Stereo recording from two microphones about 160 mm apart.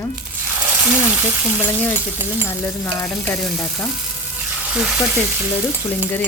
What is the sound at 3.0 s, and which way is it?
A woman's voice, centre (ahead or behind).